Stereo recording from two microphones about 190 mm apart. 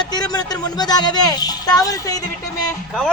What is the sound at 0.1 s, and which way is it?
Speech, 20° left (ahead or behind).